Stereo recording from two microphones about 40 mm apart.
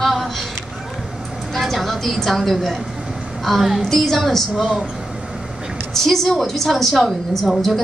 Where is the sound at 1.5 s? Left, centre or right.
Centre.